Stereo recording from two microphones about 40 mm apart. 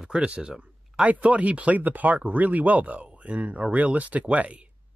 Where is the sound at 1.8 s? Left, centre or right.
Right.